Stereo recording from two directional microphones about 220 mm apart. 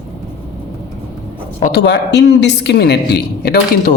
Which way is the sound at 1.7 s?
50° left (ahead or behind).